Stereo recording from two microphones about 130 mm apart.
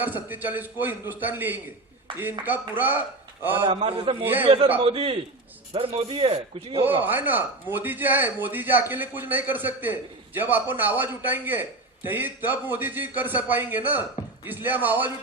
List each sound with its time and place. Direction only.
0.0 s a man's voice: 15° right (ahead or behind)
3.6 s a man's voice: 45° right (ahead or behind)
4.2 s a man's voice: 15° right (ahead or behind)
4.4 s a man's voice: 45° right (ahead or behind)
7.0 s a man's voice: 15° right (ahead or behind)